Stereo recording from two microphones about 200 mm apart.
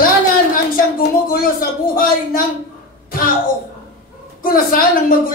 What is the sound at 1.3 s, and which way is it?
A woman's voice, 45° left (ahead or behind).